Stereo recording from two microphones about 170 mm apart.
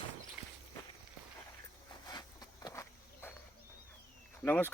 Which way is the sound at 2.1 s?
25° left (ahead or behind).